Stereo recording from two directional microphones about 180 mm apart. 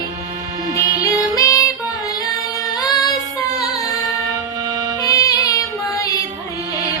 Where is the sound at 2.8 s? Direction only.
20° left (ahead or behind).